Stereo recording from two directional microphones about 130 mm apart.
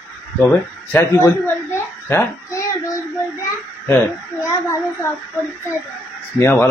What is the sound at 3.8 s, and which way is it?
Speech, 20° left (ahead or behind).